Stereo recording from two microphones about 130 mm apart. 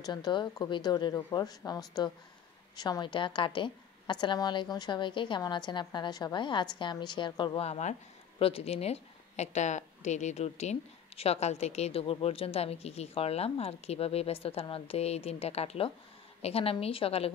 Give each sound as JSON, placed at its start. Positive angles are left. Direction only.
{"t": 0.0, "sound": "a woman's voice", "side_deg": 35}
{"t": 7.6, "sound": "a woman's voice", "side_deg": 55}